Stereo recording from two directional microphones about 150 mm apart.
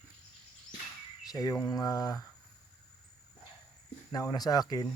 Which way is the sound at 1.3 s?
25° left (ahead or behind).